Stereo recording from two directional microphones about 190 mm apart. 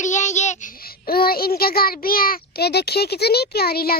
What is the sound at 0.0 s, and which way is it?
Child singing, 40° left (ahead or behind).